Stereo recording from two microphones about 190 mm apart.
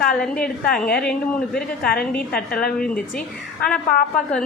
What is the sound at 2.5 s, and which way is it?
Speech, 5° left (ahead or behind).